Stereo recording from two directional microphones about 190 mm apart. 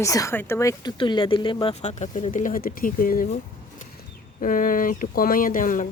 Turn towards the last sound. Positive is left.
turn(degrees=45)  # may be behind; listen again after turning